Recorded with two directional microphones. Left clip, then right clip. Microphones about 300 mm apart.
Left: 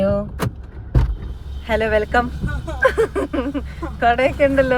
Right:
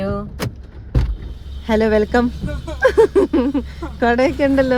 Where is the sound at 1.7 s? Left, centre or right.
Centre.